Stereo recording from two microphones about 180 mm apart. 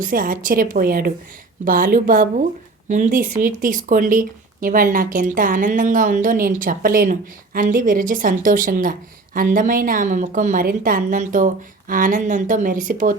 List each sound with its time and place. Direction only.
0.0 s speech: 50° right (ahead or behind)